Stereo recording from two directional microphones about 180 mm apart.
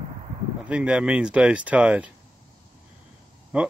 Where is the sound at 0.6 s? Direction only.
5° right (ahead or behind).